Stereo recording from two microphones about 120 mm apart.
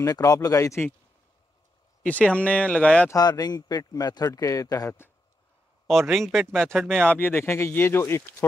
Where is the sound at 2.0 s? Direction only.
10° left (ahead or behind).